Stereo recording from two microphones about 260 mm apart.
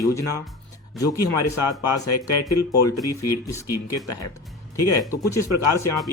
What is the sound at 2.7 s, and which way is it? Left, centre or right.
Speech, centre.